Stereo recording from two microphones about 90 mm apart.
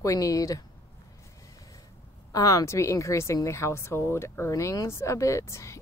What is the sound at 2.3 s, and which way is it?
Speech, 40° left (ahead or behind).